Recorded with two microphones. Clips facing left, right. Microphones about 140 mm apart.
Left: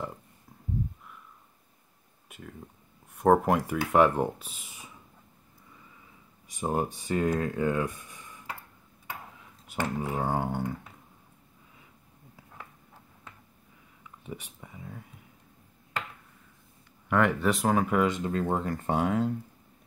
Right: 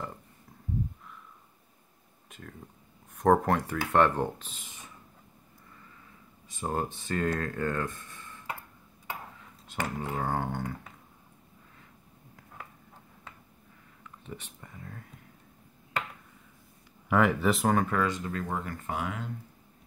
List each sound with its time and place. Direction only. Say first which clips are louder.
2.2 s a sound: left 2 dB; 5° left (ahead or behind)
3.2 s speech: left 1 dB; 10° left (ahead or behind)
6.5 s speech: left 3 dB; 15° left (ahead or behind)
9.9 s speech: left 2 dB; 10° left (ahead or behind)
14.0 s speech: left 2 dB; 10° left (ahead or behind)
17.1 s speech: even; 5° right (ahead or behind)
17.9 s speech: left 4 dB; 20° left (ahead or behind)